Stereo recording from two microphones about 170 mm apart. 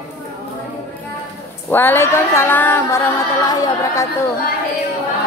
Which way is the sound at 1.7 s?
10° left (ahead or behind).